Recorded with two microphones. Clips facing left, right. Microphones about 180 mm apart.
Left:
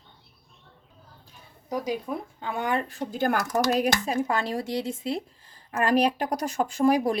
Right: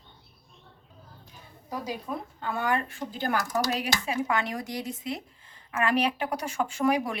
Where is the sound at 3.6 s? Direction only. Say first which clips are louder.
Left 5 dB; 45° left (ahead or behind).